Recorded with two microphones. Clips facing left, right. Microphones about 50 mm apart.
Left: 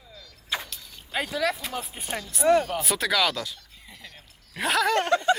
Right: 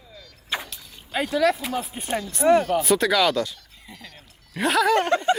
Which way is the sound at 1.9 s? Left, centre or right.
Centre.